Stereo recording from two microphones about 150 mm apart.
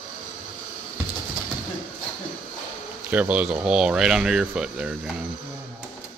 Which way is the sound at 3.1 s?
10° right (ahead or behind).